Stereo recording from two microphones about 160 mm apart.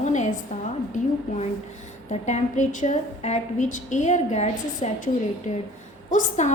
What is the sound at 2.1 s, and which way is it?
A woman's voice, 45° left (ahead or behind).